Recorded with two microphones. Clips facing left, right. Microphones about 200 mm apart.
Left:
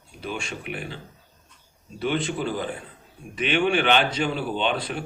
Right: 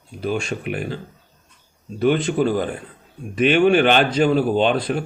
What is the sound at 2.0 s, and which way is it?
Speech, 45° right (ahead or behind).